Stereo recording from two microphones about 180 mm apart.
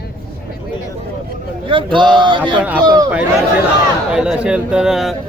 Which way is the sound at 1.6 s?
25° right (ahead or behind).